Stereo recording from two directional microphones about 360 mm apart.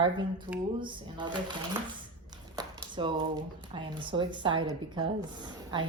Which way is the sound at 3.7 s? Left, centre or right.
Centre.